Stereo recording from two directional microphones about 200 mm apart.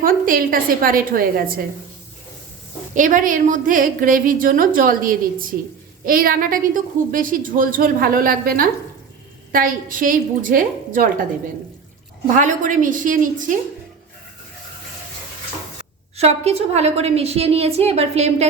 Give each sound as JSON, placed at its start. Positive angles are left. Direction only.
{"t": 0.0, "sound": "a woman's voice", "side_deg": -45}
{"t": 2.9, "sound": "a woman's voice", "side_deg": -40}
{"t": 12.4, "sound": "a woman's voice", "side_deg": -40}
{"t": 16.1, "sound": "a woman's voice", "side_deg": -30}